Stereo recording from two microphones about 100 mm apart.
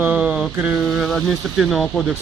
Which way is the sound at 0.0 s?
10° right (ahead or behind).